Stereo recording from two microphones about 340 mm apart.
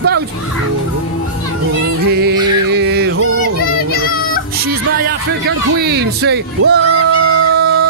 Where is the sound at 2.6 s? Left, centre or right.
Right.